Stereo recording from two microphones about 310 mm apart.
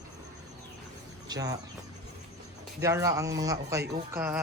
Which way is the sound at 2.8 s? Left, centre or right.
Centre.